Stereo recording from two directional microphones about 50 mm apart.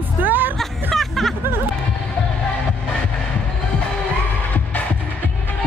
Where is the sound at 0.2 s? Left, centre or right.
Right.